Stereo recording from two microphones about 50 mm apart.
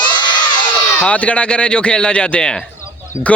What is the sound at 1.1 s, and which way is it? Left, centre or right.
Speech, left.